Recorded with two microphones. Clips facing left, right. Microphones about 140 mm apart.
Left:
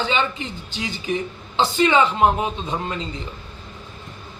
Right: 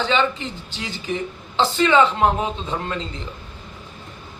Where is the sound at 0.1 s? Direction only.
10° left (ahead or behind).